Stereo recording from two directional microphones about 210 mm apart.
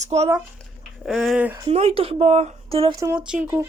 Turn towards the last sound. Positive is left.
turn(degrees=-5)  # may be behind; listen again after turning